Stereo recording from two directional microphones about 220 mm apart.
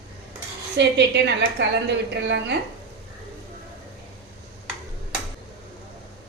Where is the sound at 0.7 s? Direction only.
50° right (ahead or behind).